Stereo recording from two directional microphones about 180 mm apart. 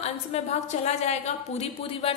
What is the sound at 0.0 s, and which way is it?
A woman's voice, 35° left (ahead or behind).